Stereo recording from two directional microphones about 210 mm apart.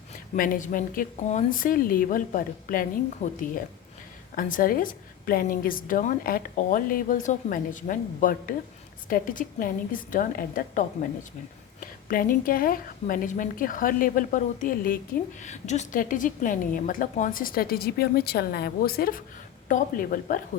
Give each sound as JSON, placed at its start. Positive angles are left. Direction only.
{"t": 0.3, "sound": "a woman's voice", "side_deg": 40}
{"t": 4.4, "sound": "a woman's voice", "side_deg": 40}